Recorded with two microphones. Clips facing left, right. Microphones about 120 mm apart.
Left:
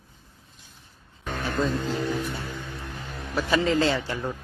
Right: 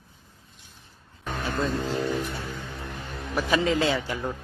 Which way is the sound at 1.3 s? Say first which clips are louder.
Left 1 dB; centre (ahead or behind).